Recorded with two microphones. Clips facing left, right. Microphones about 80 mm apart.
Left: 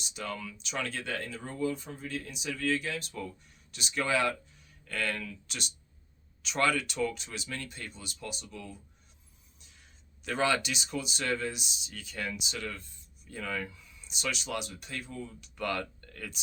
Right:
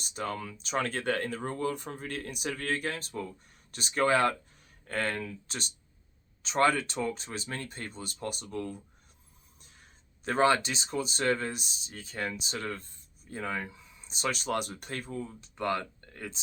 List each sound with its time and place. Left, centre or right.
0.0 s speech: right
9.6 s a sound: right
10.2 s speech: right